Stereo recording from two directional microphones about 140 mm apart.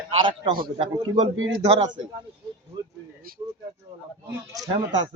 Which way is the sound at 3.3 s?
90° right.